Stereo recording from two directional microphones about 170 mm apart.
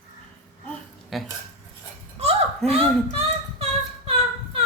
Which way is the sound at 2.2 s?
35° right (ahead or behind).